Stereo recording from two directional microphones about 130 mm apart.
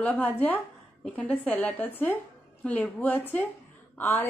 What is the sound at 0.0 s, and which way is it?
A woman's voice, 10° left (ahead or behind).